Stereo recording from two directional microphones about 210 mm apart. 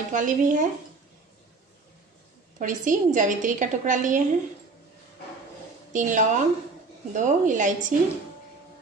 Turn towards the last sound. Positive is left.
turn(degrees=-35)  # may be behind; listen again after turning